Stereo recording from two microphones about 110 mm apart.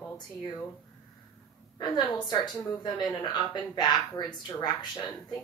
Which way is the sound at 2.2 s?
35° left (ahead or behind).